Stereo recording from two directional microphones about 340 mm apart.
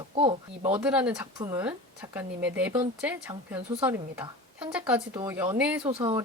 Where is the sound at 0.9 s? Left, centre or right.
Centre.